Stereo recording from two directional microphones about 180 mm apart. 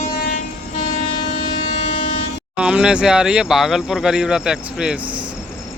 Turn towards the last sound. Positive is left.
turn(degrees=-5)  # may be behind; listen again after turning